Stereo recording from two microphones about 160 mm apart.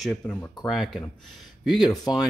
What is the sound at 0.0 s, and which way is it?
Speech, 5° left (ahead or behind).